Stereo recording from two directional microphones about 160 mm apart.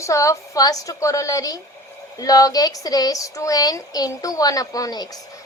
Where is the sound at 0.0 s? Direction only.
20° left (ahead or behind).